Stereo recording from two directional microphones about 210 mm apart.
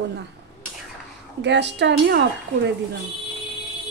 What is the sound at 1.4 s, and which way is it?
Speech, 55° right (ahead or behind).